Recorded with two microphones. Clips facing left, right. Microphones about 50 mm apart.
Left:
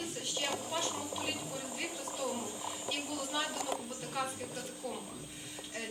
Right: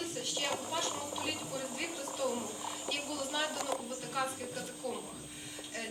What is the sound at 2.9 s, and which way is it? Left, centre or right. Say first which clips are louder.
A woman's voice: even; centre.